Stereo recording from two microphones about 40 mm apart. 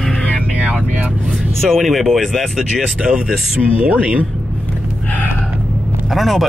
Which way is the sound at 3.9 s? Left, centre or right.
Right.